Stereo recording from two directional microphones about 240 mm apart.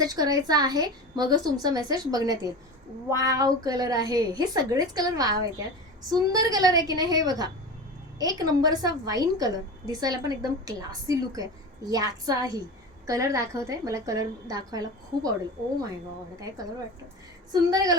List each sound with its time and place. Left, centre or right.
0.0 s a woman's voice: centre
17.5 s a woman's voice: centre